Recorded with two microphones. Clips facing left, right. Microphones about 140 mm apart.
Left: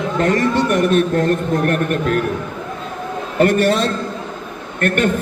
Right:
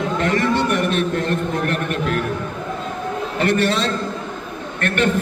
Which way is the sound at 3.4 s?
45° left (ahead or behind).